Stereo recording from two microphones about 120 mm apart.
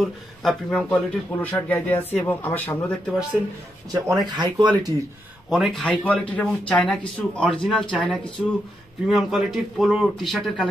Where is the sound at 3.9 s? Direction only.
35° right (ahead or behind).